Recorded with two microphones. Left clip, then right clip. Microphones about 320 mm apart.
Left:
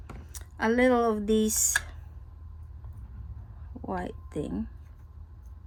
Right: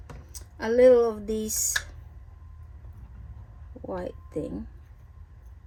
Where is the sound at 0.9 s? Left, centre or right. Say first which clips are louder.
Right 5 dB; left.